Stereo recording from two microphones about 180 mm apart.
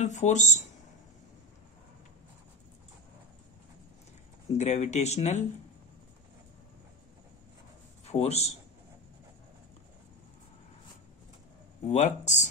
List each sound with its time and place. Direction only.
0.0 s speech: 40° left (ahead or behind)
4.6 s speech: 40° left (ahead or behind)
8.0 s a man's voice: 35° left (ahead or behind)
11.9 s speech: 40° left (ahead or behind)